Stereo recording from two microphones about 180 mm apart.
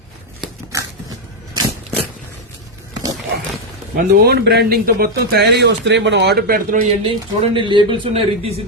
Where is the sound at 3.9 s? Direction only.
60° right (ahead or behind).